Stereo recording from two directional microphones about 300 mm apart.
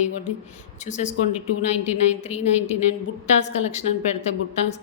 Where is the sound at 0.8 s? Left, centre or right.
Left.